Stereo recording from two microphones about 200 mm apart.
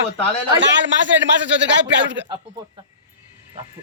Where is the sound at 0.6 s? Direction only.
65° right (ahead or behind).